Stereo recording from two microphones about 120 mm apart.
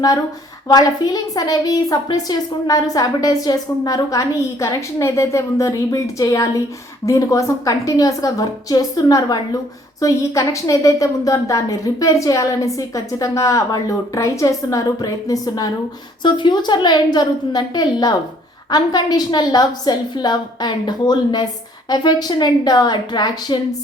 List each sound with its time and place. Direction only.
0.7 s a woman's voice: 35° left (ahead or behind)